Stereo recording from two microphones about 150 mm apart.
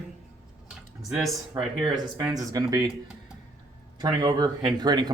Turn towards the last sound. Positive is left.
turn(degrees=-30)  # may be behind; listen again after turning